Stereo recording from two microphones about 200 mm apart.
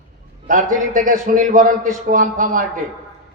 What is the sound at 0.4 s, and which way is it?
A man's voice, 45° right (ahead or behind).